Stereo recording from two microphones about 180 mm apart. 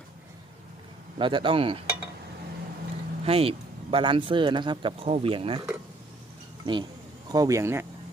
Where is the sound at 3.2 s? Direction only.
35° right (ahead or behind).